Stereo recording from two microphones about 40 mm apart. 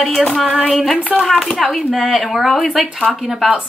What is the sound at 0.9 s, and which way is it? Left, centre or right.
Speech, left.